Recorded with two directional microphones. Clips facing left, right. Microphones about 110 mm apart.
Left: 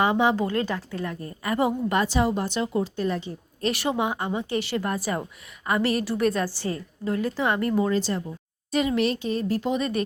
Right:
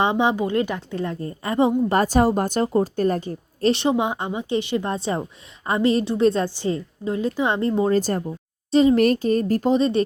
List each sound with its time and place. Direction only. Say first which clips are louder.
0.0 s a woman's voice: right 2 dB; 20° right (ahead or behind)
1.9 s speech: right 5 dB; 45° right (ahead or behind)
3.7 s a woman's voice: right 5 dB; 25° right (ahead or behind)
7.9 s speech: right 5 dB; 45° right (ahead or behind)
8.7 s speech: right 8 dB; 30° right (ahead or behind)
9.0 s speech: right 6 dB; 45° right (ahead or behind)
9.7 s a woman's voice: right 7 dB; 30° right (ahead or behind)